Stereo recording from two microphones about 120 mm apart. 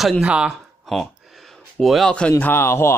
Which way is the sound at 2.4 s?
20° left (ahead or behind).